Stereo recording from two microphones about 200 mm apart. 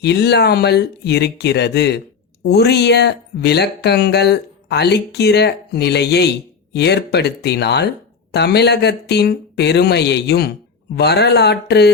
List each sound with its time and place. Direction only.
0.0 s speech: 55° left (ahead or behind)